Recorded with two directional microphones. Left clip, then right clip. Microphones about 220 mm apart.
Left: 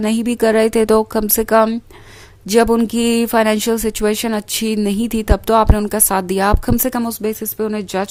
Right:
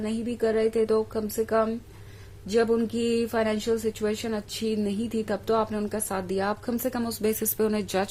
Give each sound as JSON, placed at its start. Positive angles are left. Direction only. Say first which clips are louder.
{"t": 0.0, "sound": "speech", "louder": "left 11 dB", "side_deg": 40}